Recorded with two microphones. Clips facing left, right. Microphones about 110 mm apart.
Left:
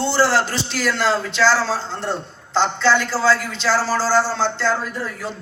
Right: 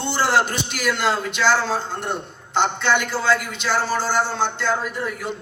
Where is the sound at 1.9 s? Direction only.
15° right (ahead or behind).